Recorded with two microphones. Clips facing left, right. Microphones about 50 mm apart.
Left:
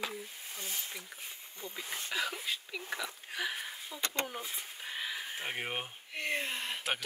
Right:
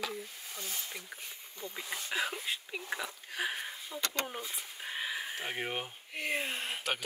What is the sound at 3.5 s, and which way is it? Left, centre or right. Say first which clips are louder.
Speech: right 1 dB; centre.